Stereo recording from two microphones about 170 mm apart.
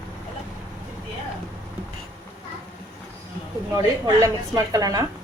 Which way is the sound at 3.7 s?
20° right (ahead or behind).